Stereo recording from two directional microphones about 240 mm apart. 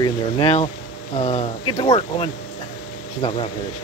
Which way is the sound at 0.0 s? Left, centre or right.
Left.